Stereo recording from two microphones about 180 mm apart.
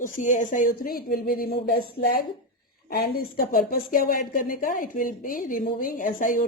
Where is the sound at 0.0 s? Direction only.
45° left (ahead or behind).